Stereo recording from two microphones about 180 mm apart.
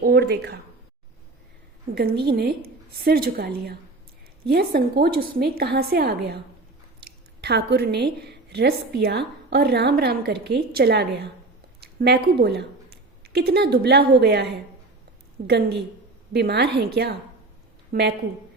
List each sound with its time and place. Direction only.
0.0 s a sound: 65° right (ahead or behind)
2.0 s a woman's voice: 60° right (ahead or behind)
7.4 s a woman's voice: 65° right (ahead or behind)
15.4 s a woman's voice: 65° right (ahead or behind)